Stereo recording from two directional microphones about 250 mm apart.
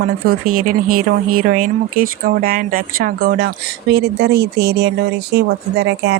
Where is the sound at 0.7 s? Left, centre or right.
Right.